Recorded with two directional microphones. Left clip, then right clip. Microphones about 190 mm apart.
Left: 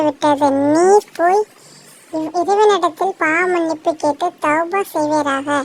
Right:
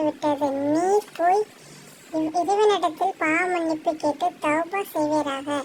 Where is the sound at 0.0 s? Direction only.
35° left (ahead or behind).